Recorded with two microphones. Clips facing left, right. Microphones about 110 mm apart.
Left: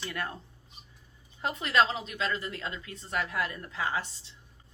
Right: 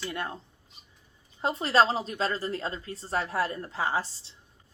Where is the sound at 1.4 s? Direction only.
30° right (ahead or behind).